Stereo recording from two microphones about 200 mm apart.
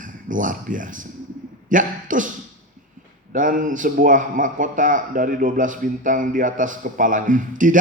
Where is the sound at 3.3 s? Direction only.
40° right (ahead or behind).